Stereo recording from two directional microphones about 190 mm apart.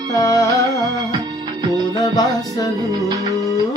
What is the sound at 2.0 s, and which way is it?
Music, 20° left (ahead or behind).